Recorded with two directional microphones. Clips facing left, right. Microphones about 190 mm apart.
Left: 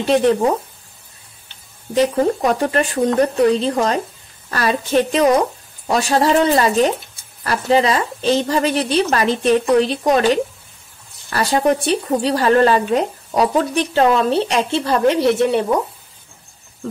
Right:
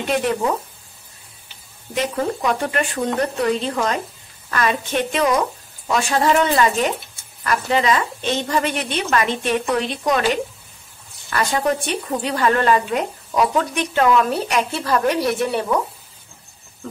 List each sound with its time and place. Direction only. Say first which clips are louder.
2.0 s a woman's voice: left 6 dB; 35° left (ahead or behind)